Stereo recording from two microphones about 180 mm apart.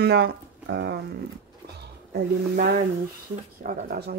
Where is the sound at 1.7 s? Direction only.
65° right (ahead or behind).